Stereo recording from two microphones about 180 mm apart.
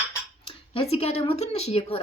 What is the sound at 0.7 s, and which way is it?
Speech, 35° left (ahead or behind).